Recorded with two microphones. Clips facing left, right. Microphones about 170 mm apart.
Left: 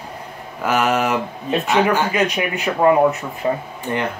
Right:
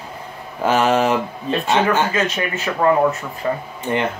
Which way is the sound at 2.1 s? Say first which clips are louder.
Left 1 dB; 15° left (ahead or behind).